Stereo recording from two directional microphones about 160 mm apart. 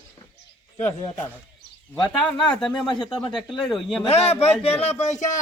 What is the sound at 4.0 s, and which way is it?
Speech, 40° left (ahead or behind).